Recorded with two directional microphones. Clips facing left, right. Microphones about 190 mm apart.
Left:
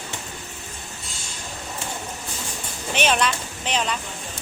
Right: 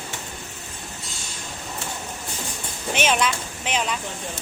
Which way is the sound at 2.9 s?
10° right (ahead or behind).